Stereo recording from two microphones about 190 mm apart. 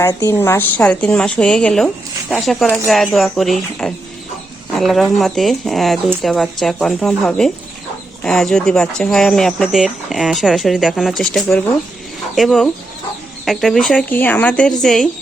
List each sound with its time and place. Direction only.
0.0 s speech: 15° left (ahead or behind)